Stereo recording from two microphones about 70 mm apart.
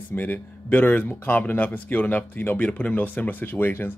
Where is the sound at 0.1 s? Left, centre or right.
Left.